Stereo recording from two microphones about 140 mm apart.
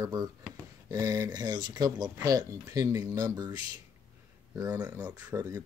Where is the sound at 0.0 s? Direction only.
25° right (ahead or behind).